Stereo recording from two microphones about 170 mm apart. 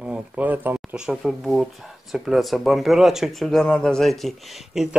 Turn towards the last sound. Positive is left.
turn(degrees=0)  # may be behind; listen again after turning